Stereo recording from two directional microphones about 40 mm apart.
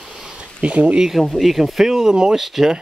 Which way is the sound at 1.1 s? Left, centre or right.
Centre.